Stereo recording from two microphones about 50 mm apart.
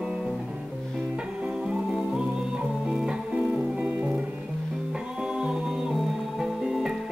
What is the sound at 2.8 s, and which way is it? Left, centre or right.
Music, centre.